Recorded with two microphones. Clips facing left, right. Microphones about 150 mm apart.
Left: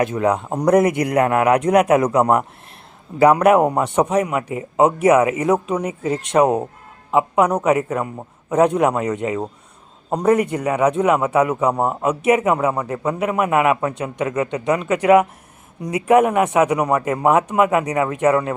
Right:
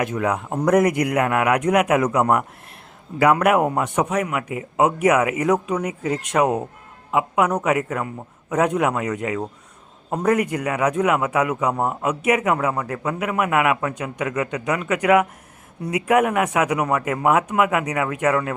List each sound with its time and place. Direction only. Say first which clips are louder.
0.0 s a man's voice: left 4 dB; 30° left (ahead or behind)
3.4 s a man's voice: left 4 dB; 30° left (ahead or behind)